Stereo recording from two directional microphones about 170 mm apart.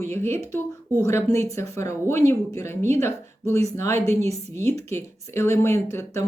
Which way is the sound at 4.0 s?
40° right (ahead or behind).